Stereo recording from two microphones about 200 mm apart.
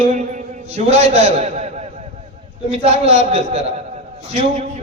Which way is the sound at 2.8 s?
35° right (ahead or behind).